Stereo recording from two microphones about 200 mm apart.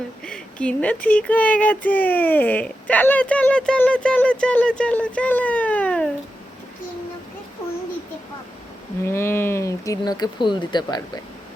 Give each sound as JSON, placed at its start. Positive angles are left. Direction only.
{"t": 0.3, "sound": "speech", "side_deg": 5}
{"t": 9.0, "sound": "speech", "side_deg": 15}